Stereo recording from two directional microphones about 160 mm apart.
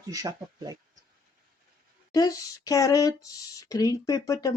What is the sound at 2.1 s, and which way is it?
Speech, 25° left (ahead or behind).